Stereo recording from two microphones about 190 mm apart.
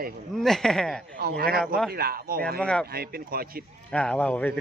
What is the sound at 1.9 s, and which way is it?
Speech, 55° right (ahead or behind).